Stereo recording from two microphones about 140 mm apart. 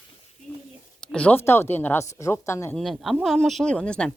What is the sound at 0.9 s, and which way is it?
Speech, 5° left (ahead or behind).